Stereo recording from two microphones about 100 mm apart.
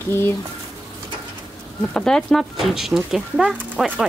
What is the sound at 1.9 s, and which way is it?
Speech, 5° left (ahead or behind).